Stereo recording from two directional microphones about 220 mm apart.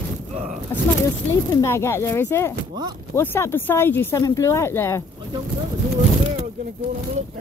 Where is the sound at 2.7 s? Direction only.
20° right (ahead or behind).